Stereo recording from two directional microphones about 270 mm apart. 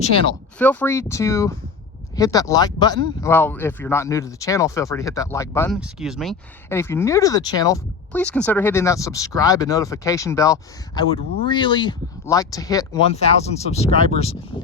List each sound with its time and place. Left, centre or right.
0.6 s speech: centre
5.7 s speech: centre
6.7 s speech: centre